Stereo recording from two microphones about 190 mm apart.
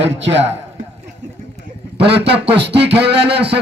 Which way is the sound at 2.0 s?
60° right (ahead or behind).